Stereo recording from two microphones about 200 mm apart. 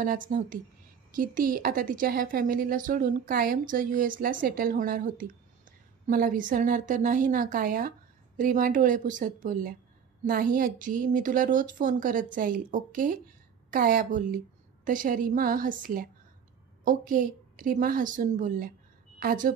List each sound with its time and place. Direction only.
0.0 s a woman's voice: 45° right (ahead or behind)